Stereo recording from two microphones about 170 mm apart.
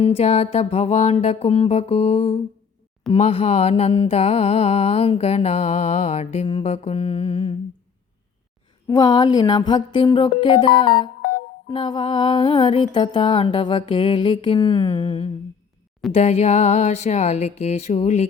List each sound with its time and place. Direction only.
0.0 s mantra: 35° left (ahead or behind)
8.9 s music: 25° left (ahead or behind)
16.1 s mantra: 40° left (ahead or behind)